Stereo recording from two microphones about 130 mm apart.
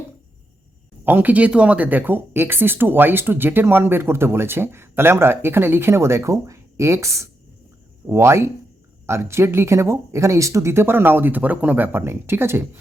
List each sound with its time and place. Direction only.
1.0 s speech: 15° right (ahead or behind)